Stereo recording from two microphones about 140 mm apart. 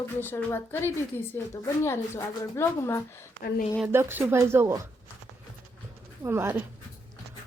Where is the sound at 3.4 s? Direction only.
90° left.